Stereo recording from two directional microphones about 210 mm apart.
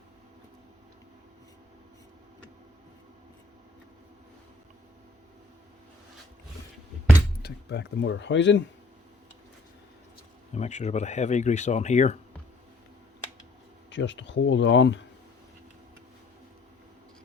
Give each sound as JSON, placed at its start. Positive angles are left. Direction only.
{"t": 7.4, "sound": "speech", "side_deg": 55}
{"t": 10.5, "sound": "speech", "side_deg": 35}
{"t": 13.9, "sound": "speech", "side_deg": 60}